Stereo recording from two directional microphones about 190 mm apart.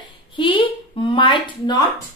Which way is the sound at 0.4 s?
25° left (ahead or behind).